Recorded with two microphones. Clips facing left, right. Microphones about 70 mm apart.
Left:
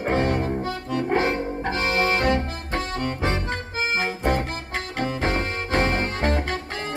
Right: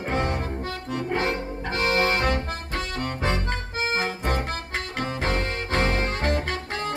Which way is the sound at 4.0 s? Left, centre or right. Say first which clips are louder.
Left 3 dB; left.